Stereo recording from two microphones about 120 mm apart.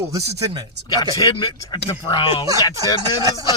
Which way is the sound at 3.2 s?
30° right (ahead or behind).